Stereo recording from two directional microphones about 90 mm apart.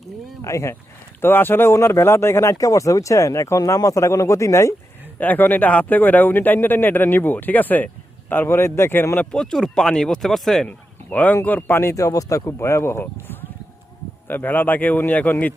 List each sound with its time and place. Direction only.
0.4 s speech: 35° left (ahead or behind)
5.2 s speech: 20° left (ahead or behind)
9.3 s speech: 5° left (ahead or behind)
10.7 s speech: 15° left (ahead or behind)